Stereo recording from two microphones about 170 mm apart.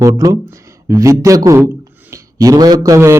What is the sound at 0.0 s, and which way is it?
Speech, 20° right (ahead or behind).